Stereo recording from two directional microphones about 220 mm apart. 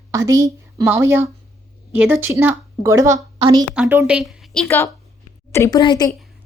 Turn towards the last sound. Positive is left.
turn(degrees=20)  # may be behind; listen again after turning